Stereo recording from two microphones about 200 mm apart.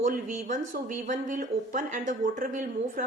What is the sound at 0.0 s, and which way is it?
Speech, 40° right (ahead or behind).